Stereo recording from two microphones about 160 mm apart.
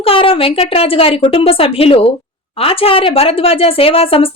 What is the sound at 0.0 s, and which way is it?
Speech, 35° left (ahead or behind).